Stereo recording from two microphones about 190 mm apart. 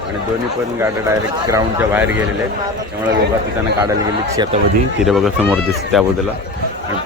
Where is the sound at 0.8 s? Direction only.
15° right (ahead or behind).